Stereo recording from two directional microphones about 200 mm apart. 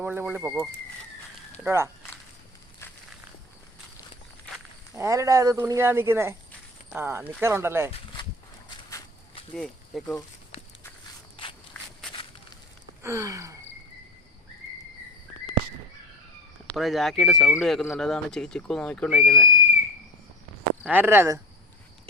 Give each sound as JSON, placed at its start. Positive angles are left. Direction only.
{"t": 0.0, "sound": "speech", "side_deg": -10}
{"t": 4.9, "sound": "speech", "side_deg": -15}
{"t": 8.9, "sound": "walk", "side_deg": 15}
{"t": 9.6, "sound": "speech", "side_deg": 5}
{"t": 13.0, "sound": "gasp", "side_deg": -15}
{"t": 16.7, "sound": "speech", "side_deg": 0}
{"t": 20.8, "sound": "speech", "side_deg": -10}